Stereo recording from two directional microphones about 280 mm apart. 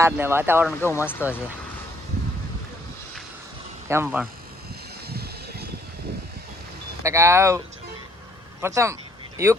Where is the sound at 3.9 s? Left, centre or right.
Centre.